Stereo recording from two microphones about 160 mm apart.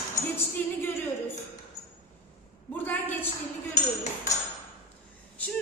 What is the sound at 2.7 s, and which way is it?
Speech, 10° left (ahead or behind).